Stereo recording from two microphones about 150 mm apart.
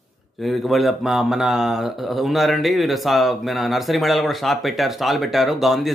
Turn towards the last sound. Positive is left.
turn(degrees=0)  # may be behind; listen again after turning